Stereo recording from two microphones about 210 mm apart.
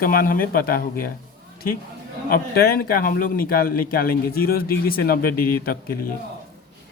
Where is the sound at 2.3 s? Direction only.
45° left (ahead or behind).